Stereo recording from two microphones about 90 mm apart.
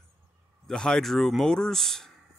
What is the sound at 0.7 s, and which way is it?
Speech, 5° left (ahead or behind).